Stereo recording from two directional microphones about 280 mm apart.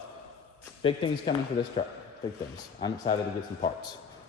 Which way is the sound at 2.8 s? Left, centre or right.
Centre.